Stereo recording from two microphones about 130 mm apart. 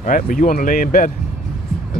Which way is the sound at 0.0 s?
90° left.